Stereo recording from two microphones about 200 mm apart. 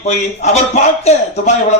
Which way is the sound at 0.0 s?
35° left (ahead or behind).